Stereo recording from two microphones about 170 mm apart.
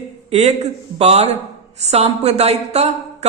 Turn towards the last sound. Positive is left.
turn(degrees=-40)  # may be behind; listen again after turning